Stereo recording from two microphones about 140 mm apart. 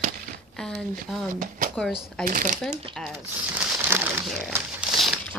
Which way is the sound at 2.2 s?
70° right (ahead or behind).